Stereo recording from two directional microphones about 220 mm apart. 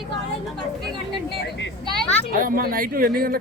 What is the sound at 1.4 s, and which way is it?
Speech, 55° left (ahead or behind).